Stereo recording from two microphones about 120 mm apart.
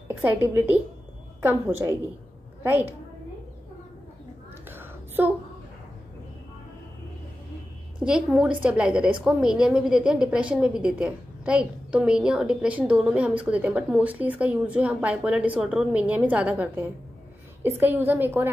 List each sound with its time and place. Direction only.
0.1 s a woman's voice: 15° right (ahead or behind)
4.6 s whispering: 15° right (ahead or behind)
8.0 s a woman's voice: 5° right (ahead or behind)